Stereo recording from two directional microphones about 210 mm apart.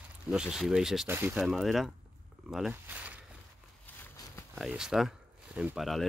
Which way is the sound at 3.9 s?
10° left (ahead or behind).